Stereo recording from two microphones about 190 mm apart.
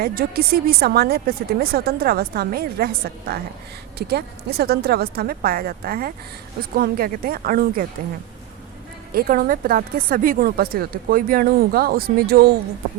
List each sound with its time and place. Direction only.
0.0 s a woman's voice: 50° right (ahead or behind)
9.1 s speech: 50° right (ahead or behind)